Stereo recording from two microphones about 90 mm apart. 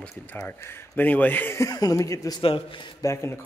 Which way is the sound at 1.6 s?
45° left (ahead or behind).